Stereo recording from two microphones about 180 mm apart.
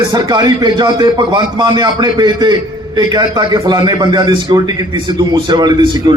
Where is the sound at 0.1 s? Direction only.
25° right (ahead or behind).